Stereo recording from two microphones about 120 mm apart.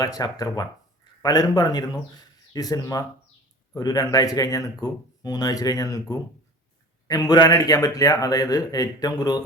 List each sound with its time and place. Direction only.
0.0 s speech: 30° left (ahead or behind)